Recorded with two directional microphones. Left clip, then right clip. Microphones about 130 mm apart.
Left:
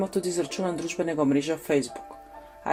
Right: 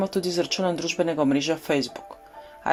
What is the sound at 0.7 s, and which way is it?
Speech, 35° right (ahead or behind).